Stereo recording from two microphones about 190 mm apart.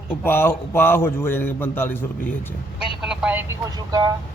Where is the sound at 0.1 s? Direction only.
10° left (ahead or behind).